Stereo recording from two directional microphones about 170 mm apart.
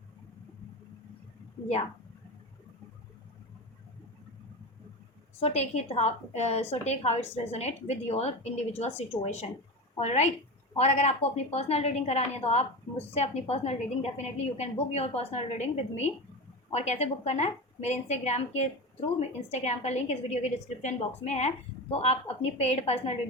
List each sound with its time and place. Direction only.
5.4 s a woman's voice: 40° left (ahead or behind)